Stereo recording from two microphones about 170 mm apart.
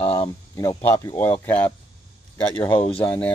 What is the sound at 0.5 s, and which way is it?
Speech, 15° left (ahead or behind).